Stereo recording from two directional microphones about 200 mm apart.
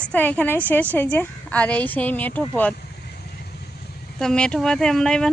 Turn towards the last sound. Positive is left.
turn(degrees=5)  # may be behind; listen again after turning